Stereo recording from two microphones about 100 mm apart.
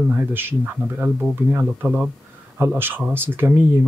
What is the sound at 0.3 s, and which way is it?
A man's voice, 20° right (ahead or behind).